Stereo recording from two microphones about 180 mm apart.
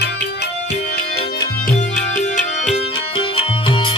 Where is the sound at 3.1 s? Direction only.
30° left (ahead or behind).